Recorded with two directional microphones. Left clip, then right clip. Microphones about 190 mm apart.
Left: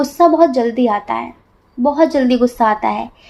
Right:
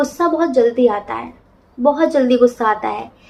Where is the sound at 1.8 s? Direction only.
40° left (ahead or behind).